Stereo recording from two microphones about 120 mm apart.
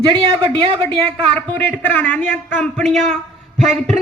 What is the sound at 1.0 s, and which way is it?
A man's voice, 10° left (ahead or behind).